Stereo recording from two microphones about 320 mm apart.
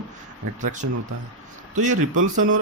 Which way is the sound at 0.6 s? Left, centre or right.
Right.